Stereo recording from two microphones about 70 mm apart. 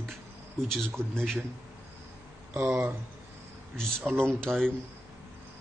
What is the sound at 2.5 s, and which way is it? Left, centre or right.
Speech, right.